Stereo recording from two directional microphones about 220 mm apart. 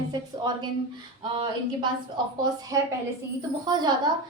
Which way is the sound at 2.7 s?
15° right (ahead or behind).